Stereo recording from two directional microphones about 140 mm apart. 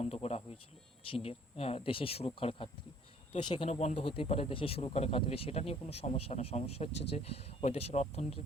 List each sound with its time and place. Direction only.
0.0 s speech: 45° left (ahead or behind)
3.7 s speech: 50° left (ahead or behind)